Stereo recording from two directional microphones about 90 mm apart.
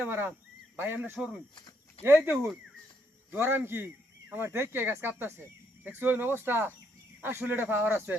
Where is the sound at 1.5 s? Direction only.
65° left (ahead or behind).